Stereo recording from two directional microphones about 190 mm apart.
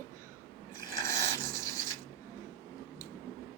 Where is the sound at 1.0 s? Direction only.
15° left (ahead or behind).